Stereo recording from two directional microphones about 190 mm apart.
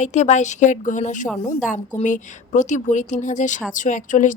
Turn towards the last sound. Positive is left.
turn(degrees=40)  # may be behind; listen again after turning